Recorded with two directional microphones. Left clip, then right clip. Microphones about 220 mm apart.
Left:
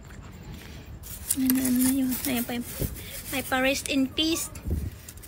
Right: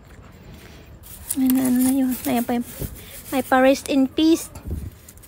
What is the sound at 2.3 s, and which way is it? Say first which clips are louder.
A woman's voice: right 7 dB; 30° right (ahead or behind).